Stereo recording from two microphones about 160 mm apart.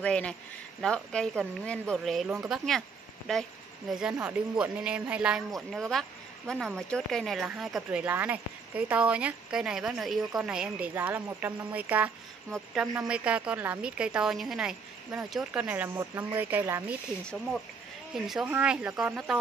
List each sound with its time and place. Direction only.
0.0 s speech: 5° left (ahead or behind); by 12.1 s 10° right (ahead or behind)
12.4 s speech: centre (ahead or behind)
17.2 s speech: 5° left (ahead or behind)